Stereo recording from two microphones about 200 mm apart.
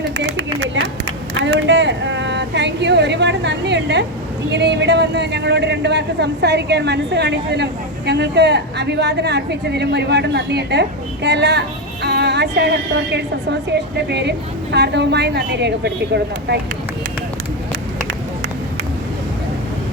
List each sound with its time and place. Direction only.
0.3 s speech: 65° right (ahead or behind)
1.3 s a sound: 65° right (ahead or behind)
4.5 s a man's voice: 60° right (ahead or behind)
12.0 s music: 55° right (ahead or behind)
13.7 s a man's voice: 55° right (ahead or behind)